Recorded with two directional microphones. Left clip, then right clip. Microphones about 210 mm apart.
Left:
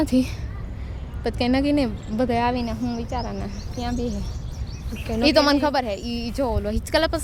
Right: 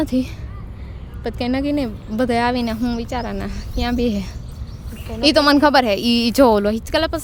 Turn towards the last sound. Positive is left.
turn(degrees=-10)  # may be behind; listen again after turning